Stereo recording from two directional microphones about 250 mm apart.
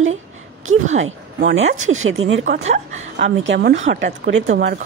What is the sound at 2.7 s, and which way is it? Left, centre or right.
Speech, right.